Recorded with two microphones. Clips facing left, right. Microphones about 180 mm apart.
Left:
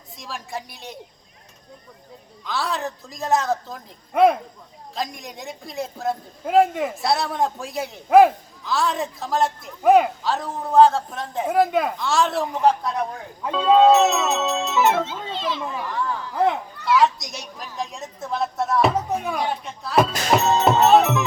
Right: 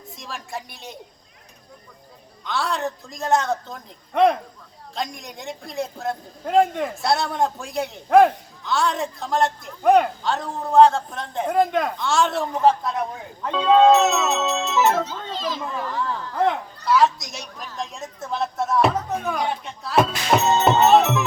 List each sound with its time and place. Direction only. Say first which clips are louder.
0.2 s a man's voice: left 1 dB; centre (ahead or behind)
2.4 s a man's voice: right 1 dB; centre (ahead or behind)
15.3 s children playing: left 1 dB; 40° right (ahead or behind)
15.6 s a woman's voice: even; 10° left (ahead or behind)